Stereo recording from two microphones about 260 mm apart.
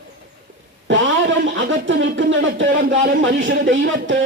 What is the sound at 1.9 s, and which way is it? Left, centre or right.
Speech, right.